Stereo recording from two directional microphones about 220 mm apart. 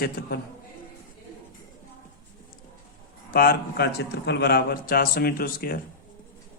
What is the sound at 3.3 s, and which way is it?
A man's voice, 45° left (ahead or behind).